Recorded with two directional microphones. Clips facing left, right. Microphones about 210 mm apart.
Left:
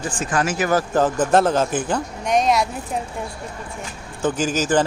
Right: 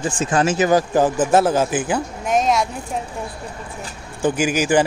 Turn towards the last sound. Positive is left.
turn(degrees=-10)  # may be behind; listen again after turning